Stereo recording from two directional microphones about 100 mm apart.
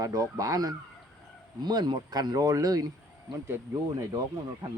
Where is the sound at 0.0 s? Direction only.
35° right (ahead or behind).